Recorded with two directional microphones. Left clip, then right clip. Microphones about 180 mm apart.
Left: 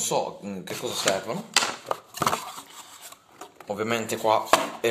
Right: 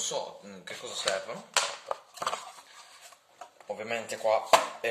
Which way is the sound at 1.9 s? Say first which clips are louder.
Left 7 dB; 30° left (ahead or behind).